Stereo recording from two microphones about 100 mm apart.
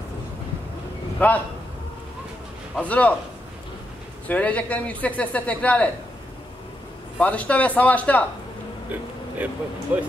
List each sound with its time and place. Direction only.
1.2 s a man's voice: 15° left (ahead or behind)
2.8 s a man's voice: 15° left (ahead or behind)
4.3 s a man's voice: 15° left (ahead or behind)
7.2 s a man's voice: 15° left (ahead or behind)
9.9 s speech: 15° right (ahead or behind)